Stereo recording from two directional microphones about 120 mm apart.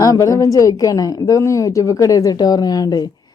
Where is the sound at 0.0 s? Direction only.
25° left (ahead or behind).